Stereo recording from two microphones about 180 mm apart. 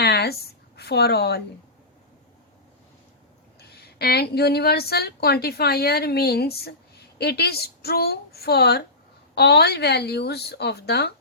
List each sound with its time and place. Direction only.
0.0 s a sound: 65° left (ahead or behind)
0.8 s speech: 65° left (ahead or behind)
3.6 s a woman's voice: 65° left (ahead or behind)